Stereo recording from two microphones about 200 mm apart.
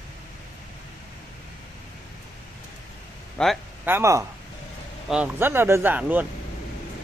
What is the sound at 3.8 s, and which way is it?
Speech, 15° right (ahead or behind).